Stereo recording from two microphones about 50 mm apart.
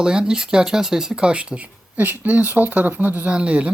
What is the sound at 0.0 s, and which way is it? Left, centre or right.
Speech, centre.